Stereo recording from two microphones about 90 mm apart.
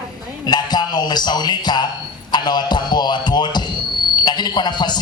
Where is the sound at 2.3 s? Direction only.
55° left (ahead or behind).